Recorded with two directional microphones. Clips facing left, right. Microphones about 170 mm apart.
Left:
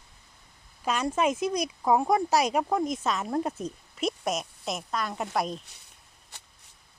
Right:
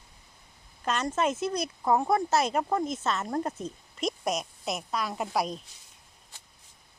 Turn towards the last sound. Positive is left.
turn(degrees=75)  # may be behind; listen again after turning